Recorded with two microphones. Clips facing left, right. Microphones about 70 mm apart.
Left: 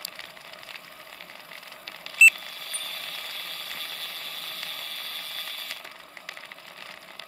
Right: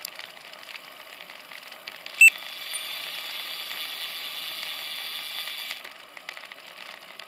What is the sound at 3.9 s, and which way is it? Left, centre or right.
Vehicle, right.